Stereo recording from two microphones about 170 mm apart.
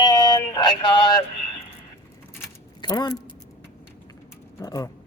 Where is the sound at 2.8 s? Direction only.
25° left (ahead or behind).